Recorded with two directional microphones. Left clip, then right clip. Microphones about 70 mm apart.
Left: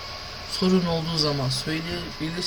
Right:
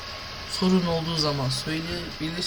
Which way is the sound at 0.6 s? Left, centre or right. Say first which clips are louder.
Left 1 dB; centre.